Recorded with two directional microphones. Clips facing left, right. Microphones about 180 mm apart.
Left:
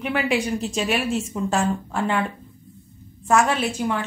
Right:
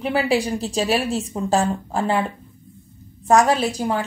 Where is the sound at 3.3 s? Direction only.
35° right (ahead or behind).